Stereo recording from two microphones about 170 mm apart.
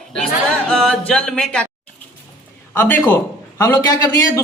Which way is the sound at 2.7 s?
10° left (ahead or behind).